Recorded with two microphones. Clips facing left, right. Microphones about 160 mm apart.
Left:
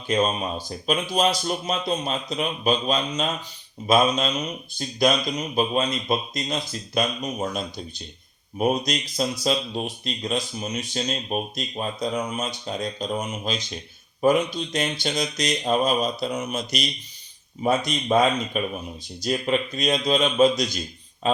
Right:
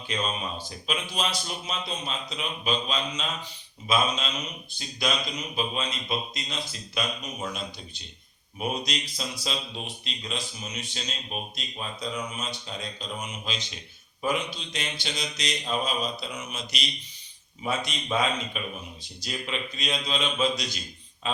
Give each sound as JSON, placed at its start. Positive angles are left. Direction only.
{"t": 0.1, "sound": "a man's voice", "side_deg": 45}